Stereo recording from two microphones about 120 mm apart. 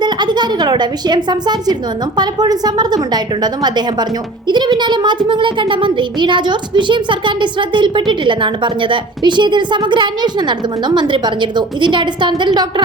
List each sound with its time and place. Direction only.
0.0 s speech: 40° right (ahead or behind)